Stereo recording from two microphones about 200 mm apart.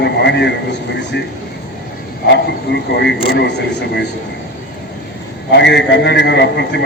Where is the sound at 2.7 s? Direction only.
55° left (ahead or behind).